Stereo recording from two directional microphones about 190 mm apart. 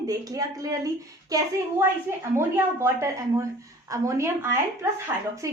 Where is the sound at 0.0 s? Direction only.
20° right (ahead or behind).